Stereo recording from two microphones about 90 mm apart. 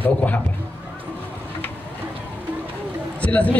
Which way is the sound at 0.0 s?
15° left (ahead or behind).